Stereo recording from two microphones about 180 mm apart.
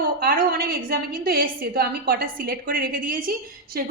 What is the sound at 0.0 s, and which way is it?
A woman's voice, 55° right (ahead or behind).